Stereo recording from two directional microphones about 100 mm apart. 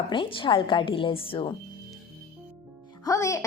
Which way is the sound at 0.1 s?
60° left (ahead or behind).